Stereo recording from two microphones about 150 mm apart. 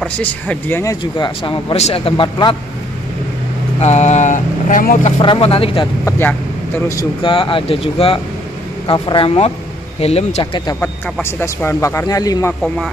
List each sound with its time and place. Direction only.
0.0 s speech: 10° left (ahead or behind)
1.1 s speech: 35° left (ahead or behind)
3.8 s speech: 50° left (ahead or behind)
5.2 s speech: 35° left (ahead or behind)
6.0 s speech: 15° left (ahead or behind)
7.2 s speech: 35° left (ahead or behind)
10.4 s speech: 30° left (ahead or behind)
11.2 s speech: 15° left (ahead or behind)